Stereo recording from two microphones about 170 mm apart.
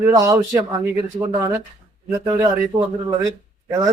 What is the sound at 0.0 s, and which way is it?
A man's voice, 20° right (ahead or behind).